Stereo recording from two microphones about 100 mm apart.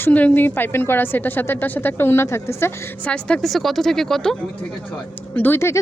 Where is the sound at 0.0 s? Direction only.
15° left (ahead or behind).